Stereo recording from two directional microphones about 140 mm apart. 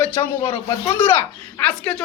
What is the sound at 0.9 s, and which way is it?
A man's voice, 15° left (ahead or behind).